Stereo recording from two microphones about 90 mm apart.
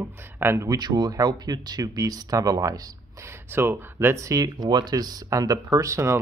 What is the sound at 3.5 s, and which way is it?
Speech, 25° right (ahead or behind).